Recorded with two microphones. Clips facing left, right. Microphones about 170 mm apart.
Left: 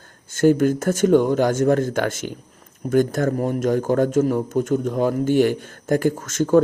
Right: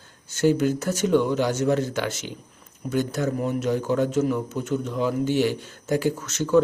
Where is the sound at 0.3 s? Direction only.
50° left (ahead or behind).